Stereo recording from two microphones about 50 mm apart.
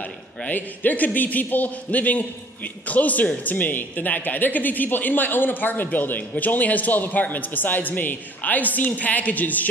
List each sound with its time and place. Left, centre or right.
0.5 s a man's voice: left